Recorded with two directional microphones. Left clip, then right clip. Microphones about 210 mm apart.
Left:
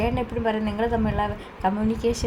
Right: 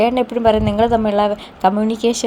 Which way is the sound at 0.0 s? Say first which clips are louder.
Right 11 dB; 45° right (ahead or behind).